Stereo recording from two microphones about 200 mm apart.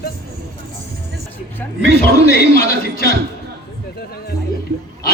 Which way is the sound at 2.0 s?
50° left (ahead or behind).